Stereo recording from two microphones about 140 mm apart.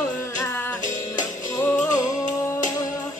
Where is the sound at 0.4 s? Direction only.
15° left (ahead or behind).